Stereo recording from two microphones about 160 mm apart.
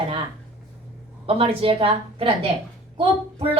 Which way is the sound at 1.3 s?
35° right (ahead or behind).